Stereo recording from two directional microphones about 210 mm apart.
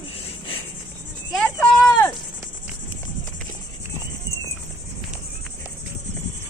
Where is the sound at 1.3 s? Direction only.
5° left (ahead or behind).